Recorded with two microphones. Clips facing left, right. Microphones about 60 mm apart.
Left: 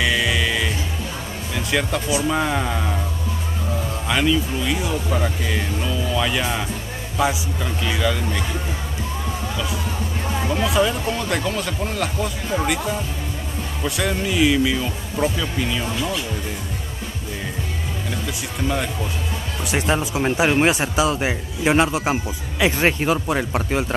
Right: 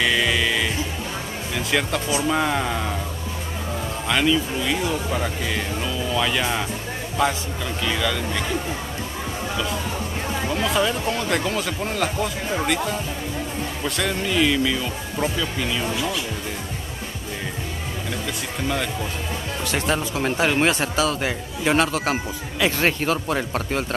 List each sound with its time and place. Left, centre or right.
0.0 s music: centre
1.5 s speech: centre
4.1 s a man's voice: centre
10.4 s a man's voice: centre
19.7 s a man's voice: centre